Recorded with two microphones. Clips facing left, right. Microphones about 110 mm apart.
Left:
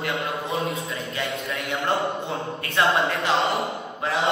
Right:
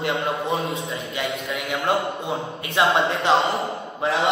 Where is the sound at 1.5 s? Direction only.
Centre (ahead or behind).